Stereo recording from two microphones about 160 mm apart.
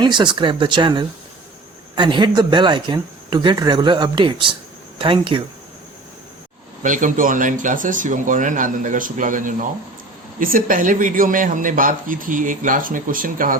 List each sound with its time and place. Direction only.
0.0 s speech: 30° right (ahead or behind)
6.8 s a man's voice: 55° right (ahead or behind)